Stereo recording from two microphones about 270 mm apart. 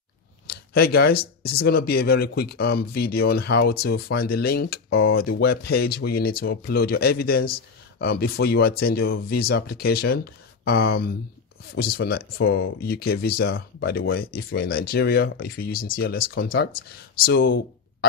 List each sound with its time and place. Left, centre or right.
0.5 s speech: left